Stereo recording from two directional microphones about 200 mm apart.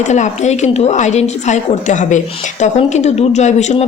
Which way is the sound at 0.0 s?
35° left (ahead or behind).